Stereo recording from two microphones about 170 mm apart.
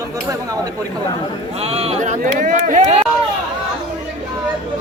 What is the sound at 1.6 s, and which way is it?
Speech, 35° right (ahead or behind).